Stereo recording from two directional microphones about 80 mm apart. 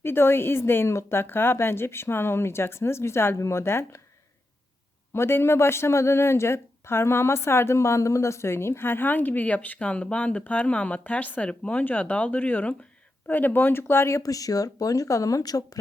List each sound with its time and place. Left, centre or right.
0.0 s speech: left
5.1 s speech: left
14.2 s speech: left